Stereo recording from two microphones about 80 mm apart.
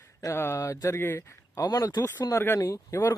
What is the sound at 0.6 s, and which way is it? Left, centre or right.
Speech, left.